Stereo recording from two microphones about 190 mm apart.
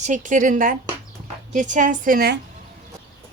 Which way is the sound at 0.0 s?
40° right (ahead or behind).